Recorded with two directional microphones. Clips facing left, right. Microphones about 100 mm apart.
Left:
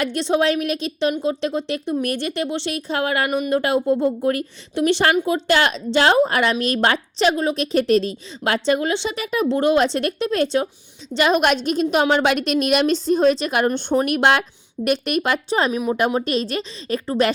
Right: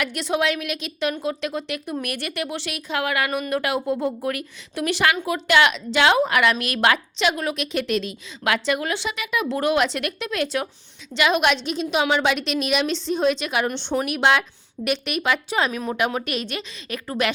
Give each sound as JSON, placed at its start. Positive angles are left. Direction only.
{"t": 0.0, "sound": "a woman's voice", "side_deg": 30}
{"t": 3.2, "sound": "a woman's voice", "side_deg": 20}
{"t": 9.5, "sound": "a woman's voice", "side_deg": 25}